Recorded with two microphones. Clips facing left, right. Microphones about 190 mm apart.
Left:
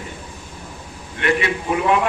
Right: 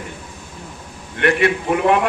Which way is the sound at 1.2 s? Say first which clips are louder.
Right 4 dB; 55° right (ahead or behind).